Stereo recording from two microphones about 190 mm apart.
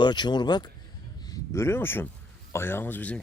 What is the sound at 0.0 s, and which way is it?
Speech, 20° left (ahead or behind).